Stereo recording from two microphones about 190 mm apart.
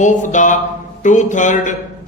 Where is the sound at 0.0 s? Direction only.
40° left (ahead or behind).